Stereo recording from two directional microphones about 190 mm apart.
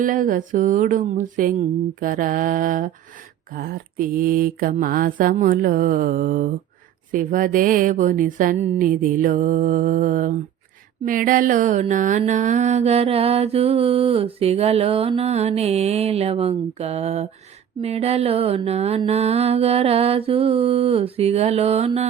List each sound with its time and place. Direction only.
0.0 s speech: 45° right (ahead or behind)
11.0 s mantra: 45° right (ahead or behind)